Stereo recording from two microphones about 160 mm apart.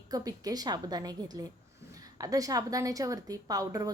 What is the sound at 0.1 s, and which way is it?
A woman's voice, 25° right (ahead or behind).